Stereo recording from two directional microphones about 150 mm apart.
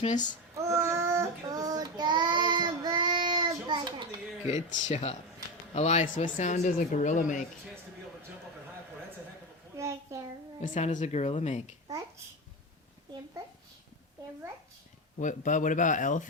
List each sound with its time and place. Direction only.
0.0 s speech: 55° left (ahead or behind)
0.5 s child singing: 20° right (ahead or behind)
4.4 s a woman's voice: 50° left (ahead or behind)
9.7 s a sound: 20° right (ahead or behind)
10.6 s a woman's voice: 55° left (ahead or behind)
15.2 s speech: 55° left (ahead or behind)